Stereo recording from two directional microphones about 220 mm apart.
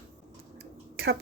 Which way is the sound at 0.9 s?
45° right (ahead or behind).